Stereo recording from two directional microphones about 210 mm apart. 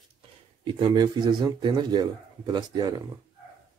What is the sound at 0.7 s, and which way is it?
A man's voice, 20° right (ahead or behind).